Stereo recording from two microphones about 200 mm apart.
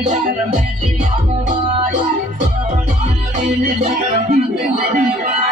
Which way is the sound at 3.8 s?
40° right (ahead or behind).